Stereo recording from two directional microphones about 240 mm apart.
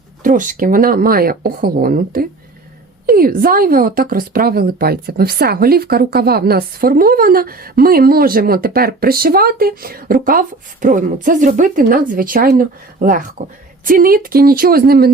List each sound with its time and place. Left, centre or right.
0.2 s speech: right